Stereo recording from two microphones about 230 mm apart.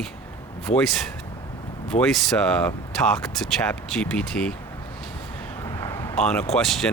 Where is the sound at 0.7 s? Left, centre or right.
Left.